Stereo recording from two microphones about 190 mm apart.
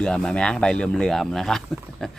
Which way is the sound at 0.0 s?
5° left (ahead or behind).